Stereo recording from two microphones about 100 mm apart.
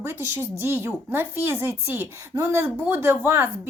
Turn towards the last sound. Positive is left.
turn(degrees=-25)  # may be behind; listen again after turning